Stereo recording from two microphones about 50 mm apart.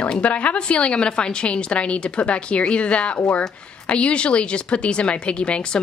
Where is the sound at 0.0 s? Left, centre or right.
Left.